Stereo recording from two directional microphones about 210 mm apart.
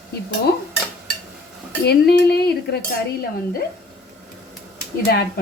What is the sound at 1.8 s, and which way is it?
Speech, 50° left (ahead or behind).